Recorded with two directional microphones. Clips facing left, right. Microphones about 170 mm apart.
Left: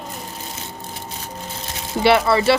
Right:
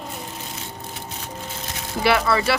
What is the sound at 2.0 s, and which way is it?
Speech, 25° left (ahead or behind).